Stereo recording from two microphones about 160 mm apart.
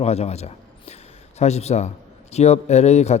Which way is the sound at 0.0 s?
40° left (ahead or behind).